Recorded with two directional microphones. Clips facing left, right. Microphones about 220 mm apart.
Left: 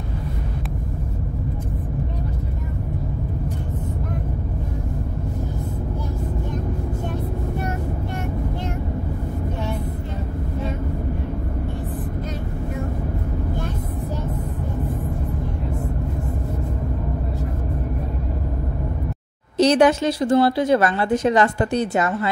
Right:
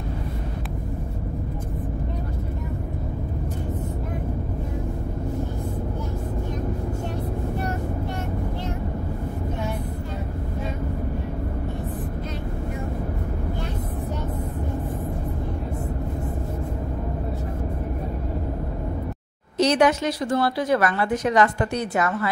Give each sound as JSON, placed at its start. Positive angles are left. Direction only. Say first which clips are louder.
{"t": 19.5, "sound": "speech", "louder": "left 4 dB", "side_deg": 30}